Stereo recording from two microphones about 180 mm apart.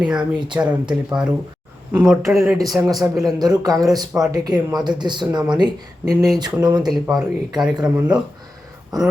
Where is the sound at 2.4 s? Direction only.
20° right (ahead or behind).